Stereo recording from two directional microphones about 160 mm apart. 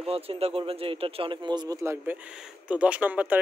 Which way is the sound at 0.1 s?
35° right (ahead or behind).